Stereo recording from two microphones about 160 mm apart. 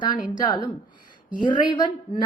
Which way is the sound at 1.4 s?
30° left (ahead or behind).